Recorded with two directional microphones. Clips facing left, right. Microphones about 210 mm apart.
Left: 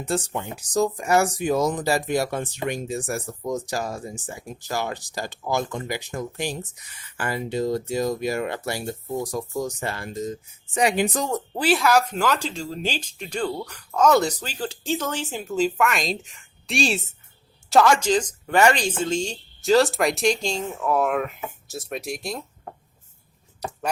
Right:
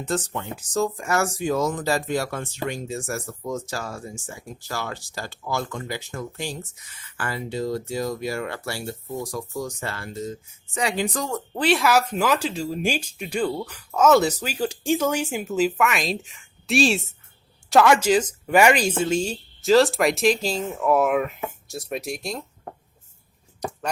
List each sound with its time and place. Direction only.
0.0 s speech: 10° left (ahead or behind)
11.5 s speech: 5° left (ahead or behind)